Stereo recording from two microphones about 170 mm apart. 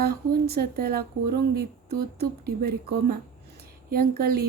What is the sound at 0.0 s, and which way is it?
Speech, 65° right (ahead or behind).